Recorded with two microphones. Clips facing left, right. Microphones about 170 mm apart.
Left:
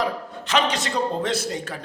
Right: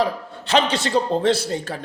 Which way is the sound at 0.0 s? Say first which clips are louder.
Right 3 dB; 30° right (ahead or behind).